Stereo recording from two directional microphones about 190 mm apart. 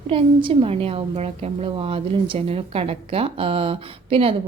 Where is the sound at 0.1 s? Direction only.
30° right (ahead or behind).